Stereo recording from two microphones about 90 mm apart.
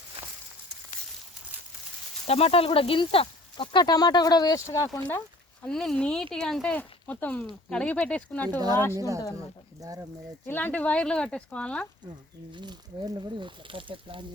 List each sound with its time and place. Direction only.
2.3 s speech: 90° left; by 4.6 s 45° left (ahead or behind)
4.6 s speech: 35° left (ahead or behind)
5.6 s speech: 5° left (ahead or behind)
6.7 s speech: 20° left (ahead or behind)
9.0 s speech: 35° right (ahead or behind)
10.4 s speech: 20° left (ahead or behind)
12.5 s speech: 50° right (ahead or behind)
13.7 s speech: 75° right (ahead or behind)